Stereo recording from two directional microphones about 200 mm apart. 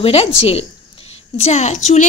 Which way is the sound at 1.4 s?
35° left (ahead or behind).